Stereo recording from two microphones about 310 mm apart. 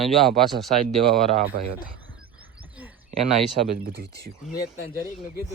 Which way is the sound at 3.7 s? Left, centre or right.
Right.